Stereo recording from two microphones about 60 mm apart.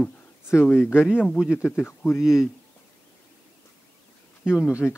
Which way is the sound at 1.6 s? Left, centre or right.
Left.